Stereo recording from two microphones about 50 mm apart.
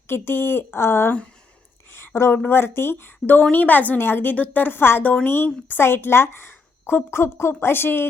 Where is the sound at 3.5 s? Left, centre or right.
Left.